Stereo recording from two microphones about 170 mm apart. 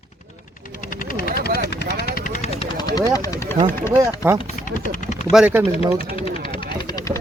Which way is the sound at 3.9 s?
20° right (ahead or behind).